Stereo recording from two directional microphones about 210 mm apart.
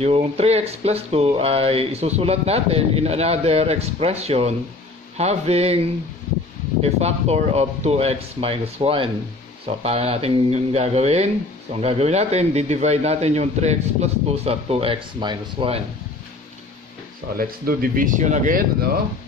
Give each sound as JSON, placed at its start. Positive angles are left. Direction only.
{"t": 0.0, "sound": "speech", "side_deg": -30}
{"t": 6.8, "sound": "a man's voice", "side_deg": -30}
{"t": 17.4, "sound": "a man's voice", "side_deg": -45}